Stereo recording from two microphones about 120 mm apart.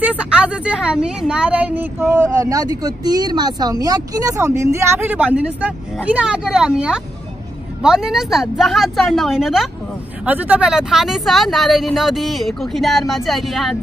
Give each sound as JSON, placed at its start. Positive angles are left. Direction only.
{"t": 0.0, "sound": "a woman's voice", "side_deg": -10}
{"t": 10.2, "sound": "speech", "side_deg": -15}